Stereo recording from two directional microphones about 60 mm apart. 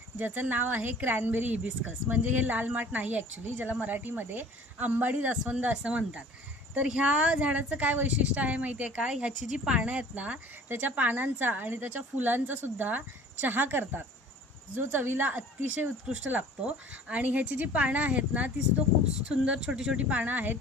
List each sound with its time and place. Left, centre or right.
0.2 s speech: right
10.5 s speech: right
19.3 s speech: centre
20.0 s speech: right